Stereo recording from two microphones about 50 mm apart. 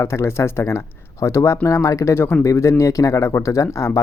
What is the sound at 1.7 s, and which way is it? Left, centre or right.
Speech, left.